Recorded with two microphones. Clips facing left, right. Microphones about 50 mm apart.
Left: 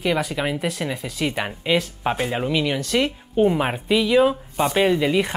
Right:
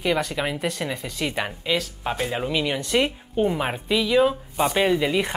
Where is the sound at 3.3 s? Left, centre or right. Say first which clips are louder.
Left 5 dB; centre.